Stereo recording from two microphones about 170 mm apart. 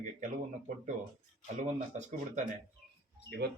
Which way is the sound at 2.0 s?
45° right (ahead or behind).